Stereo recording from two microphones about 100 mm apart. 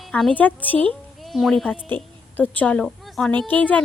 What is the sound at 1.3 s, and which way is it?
Speech, centre (ahead or behind).